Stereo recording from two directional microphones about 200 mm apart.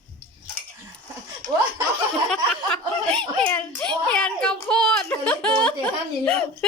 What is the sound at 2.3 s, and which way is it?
A child's voice, 5° left (ahead or behind).